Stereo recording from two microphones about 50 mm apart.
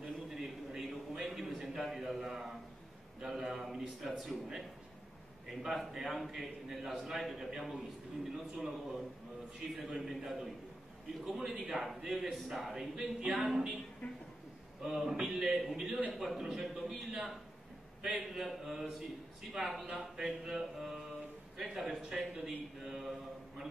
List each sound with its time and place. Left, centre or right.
0.0 s a sound: centre
3.2 s a man's voice: centre
5.5 s a man's voice: centre
14.0 s a man's voice: left
14.8 s a man's voice: centre